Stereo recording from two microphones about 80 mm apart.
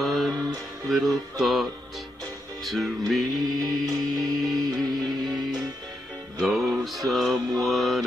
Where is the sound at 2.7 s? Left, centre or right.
Centre.